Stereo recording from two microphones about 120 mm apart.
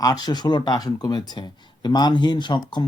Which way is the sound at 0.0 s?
30° left (ahead or behind).